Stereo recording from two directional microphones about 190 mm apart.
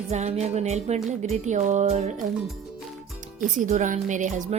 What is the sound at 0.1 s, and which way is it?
Speech, 35° right (ahead or behind).